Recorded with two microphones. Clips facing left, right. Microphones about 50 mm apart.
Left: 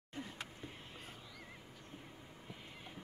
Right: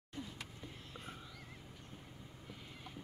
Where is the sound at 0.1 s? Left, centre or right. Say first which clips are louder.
Left 1 dB; left.